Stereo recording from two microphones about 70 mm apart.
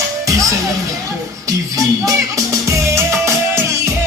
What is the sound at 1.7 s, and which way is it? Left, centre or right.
Music, right.